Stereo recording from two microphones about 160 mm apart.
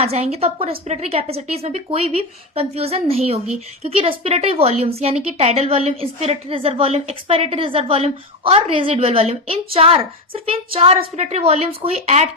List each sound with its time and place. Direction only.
0.0 s a woman's voice: 40° right (ahead or behind)